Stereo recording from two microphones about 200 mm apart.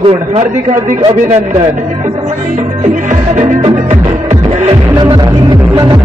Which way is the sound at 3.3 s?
35° right (ahead or behind).